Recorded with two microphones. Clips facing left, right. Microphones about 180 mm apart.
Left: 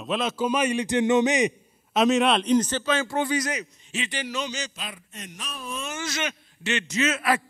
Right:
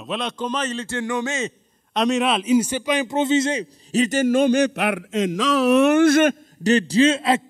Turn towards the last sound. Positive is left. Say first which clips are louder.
# right 7 dB
turn(degrees=-25)  # may be behind; listen again after turning